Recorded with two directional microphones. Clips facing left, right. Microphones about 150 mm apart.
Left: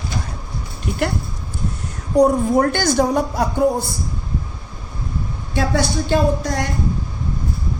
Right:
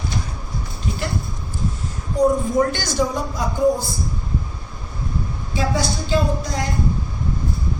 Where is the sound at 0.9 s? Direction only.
60° left (ahead or behind).